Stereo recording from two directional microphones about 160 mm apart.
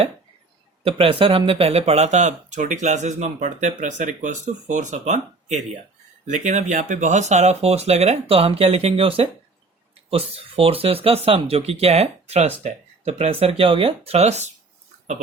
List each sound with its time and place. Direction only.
0.9 s speech: 35° right (ahead or behind)